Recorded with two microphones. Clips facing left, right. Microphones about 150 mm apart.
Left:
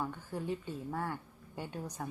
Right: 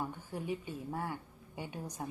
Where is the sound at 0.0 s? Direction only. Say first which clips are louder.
Left 1 dB; 15° right (ahead or behind).